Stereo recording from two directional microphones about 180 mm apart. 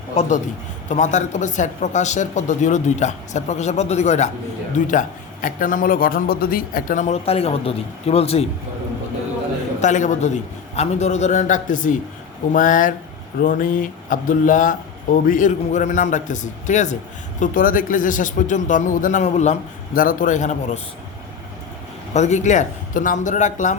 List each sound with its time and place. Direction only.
0.9 s a man's voice: 40° left (ahead or behind)
9.8 s a man's voice: 40° left (ahead or behind)
19.9 s a man's voice: 50° left (ahead or behind)
22.1 s a man's voice: 40° left (ahead or behind)